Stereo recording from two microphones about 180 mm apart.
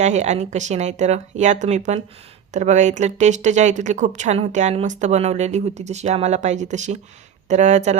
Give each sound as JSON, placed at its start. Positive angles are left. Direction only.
{"t": 0.0, "sound": "speech", "side_deg": -40}